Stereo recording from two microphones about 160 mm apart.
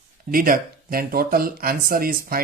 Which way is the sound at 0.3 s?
60° right (ahead or behind).